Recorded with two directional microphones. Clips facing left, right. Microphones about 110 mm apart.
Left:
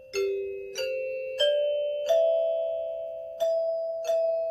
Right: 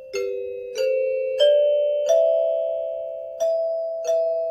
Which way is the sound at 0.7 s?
35° right (ahead or behind).